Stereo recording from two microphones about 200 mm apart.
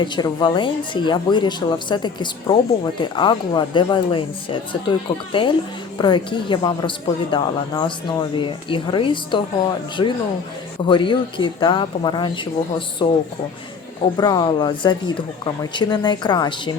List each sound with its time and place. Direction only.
0.0 s speech: 20° left (ahead or behind)
14.2 s speech: 20° left (ahead or behind)